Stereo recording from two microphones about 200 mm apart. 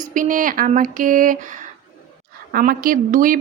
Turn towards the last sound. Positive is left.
turn(degrees=-45)  # may be behind; listen again after turning